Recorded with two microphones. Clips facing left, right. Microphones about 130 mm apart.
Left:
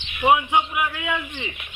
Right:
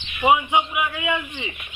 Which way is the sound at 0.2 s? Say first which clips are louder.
Even; centre (ahead or behind).